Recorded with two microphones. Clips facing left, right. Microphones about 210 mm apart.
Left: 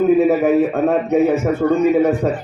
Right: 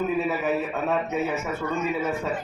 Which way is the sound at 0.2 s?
50° left (ahead or behind).